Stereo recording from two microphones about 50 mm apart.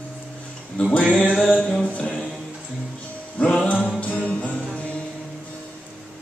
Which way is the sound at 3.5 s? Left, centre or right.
Left.